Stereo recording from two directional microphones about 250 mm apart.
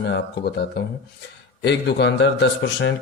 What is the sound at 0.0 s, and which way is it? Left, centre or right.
A man's voice, left.